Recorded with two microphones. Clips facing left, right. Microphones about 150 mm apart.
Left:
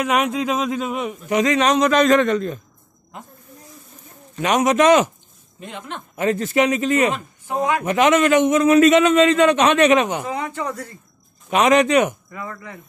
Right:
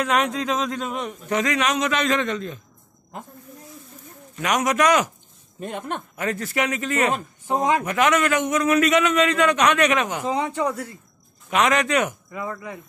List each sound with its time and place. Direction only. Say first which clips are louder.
0.0 s a man's voice: left 2 dB; 10° left (ahead or behind)
1.4 s a man's voice: left 7 dB; 30° left (ahead or behind)
2.1 s a man's voice: left 7 dB; 50° left (ahead or behind)
4.4 s a man's voice: left 4 dB; 25° left (ahead or behind)
5.6 s speech: right 4 dB; 50° right (ahead or behind)
6.1 s a man's voice: left 8 dB; 25° left (ahead or behind)
7.4 s speech: even; 25° right (ahead or behind)
7.8 s a man's voice: left 4 dB; 20° left (ahead or behind)
10.2 s speech: right 2 dB; 15° right (ahead or behind)
11.5 s a man's voice: left 5 dB; 20° left (ahead or behind)
12.3 s speech: right 2 dB; 15° right (ahead or behind)